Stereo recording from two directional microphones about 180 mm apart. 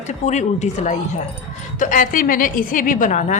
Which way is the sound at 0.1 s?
40° left (ahead or behind).